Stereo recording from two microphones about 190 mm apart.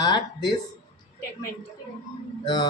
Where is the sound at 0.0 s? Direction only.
20° left (ahead or behind).